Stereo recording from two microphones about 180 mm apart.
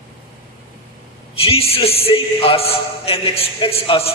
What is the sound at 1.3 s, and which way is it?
A man's voice, 30° left (ahead or behind).